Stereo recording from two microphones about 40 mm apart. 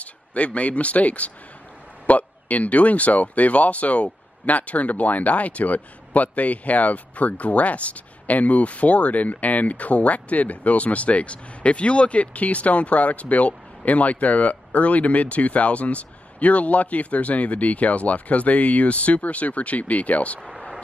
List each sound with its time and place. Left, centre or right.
0.0 s speech: left